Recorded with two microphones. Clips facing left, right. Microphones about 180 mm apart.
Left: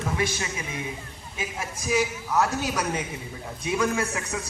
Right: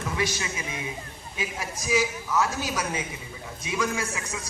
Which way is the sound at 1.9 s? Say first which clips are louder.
Even; 60° left (ahead or behind).